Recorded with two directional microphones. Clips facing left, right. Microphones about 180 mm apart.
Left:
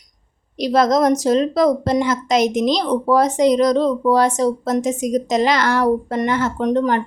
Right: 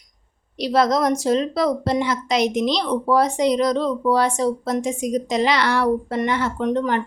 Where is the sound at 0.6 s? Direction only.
45° left (ahead or behind).